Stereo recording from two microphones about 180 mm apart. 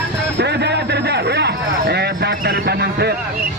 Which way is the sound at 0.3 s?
70° right (ahead or behind).